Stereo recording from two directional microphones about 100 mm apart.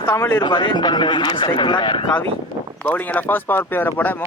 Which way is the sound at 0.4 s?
50° left (ahead or behind).